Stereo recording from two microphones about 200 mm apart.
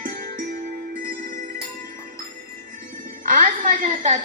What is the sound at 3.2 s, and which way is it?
Speech, 40° right (ahead or behind).